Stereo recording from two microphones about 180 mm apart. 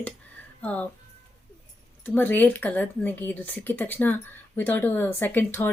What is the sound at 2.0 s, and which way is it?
Speech, 10° left (ahead or behind).